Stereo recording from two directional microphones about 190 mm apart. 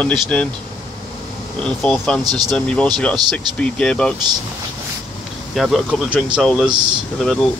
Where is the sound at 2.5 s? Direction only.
5° left (ahead or behind).